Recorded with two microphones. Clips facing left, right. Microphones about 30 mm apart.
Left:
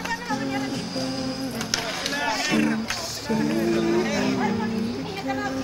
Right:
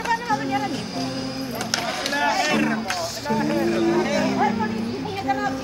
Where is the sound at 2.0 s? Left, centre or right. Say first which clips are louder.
Right 4 dB; centre.